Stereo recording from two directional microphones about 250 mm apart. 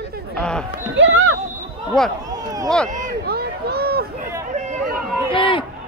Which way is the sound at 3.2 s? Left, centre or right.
Right.